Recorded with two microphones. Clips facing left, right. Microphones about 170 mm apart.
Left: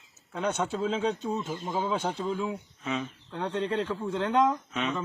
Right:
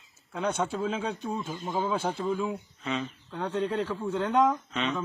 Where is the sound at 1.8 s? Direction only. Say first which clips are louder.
Right 2 dB; 10° right (ahead or behind).